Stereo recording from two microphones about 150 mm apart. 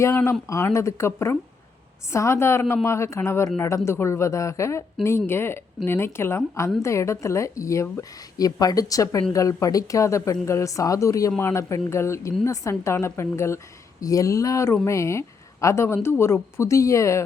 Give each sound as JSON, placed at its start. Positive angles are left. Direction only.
{"t": 0.0, "sound": "a woman's voice", "side_deg": 15}